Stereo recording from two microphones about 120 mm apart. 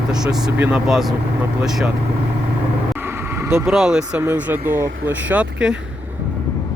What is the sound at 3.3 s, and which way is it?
Vehicle, 25° right (ahead or behind).